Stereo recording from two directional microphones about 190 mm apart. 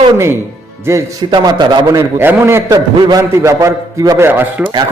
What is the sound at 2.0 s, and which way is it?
A man's voice, 10° right (ahead or behind).